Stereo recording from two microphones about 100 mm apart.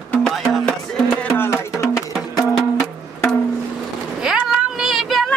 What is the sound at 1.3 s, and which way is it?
Music, 25° left (ahead or behind).